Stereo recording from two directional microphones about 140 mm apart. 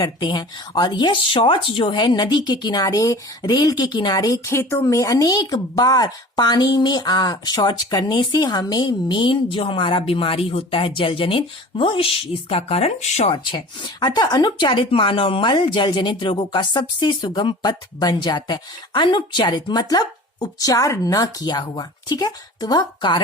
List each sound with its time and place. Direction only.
0.0 s speech: 30° left (ahead or behind); by 13.3 s 55° left (ahead or behind)
13.3 s speech: 35° left (ahead or behind)